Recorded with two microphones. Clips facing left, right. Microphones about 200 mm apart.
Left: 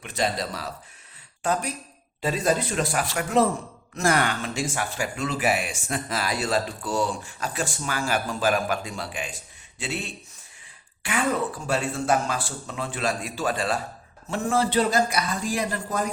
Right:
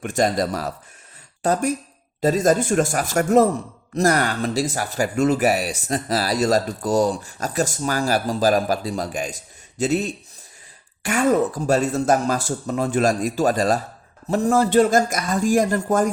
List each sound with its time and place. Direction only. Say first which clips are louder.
0.0 s a man's voice: right 7 dB; 45° right (ahead or behind)